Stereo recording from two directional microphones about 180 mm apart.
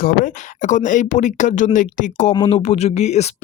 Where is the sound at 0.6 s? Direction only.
45° left (ahead or behind).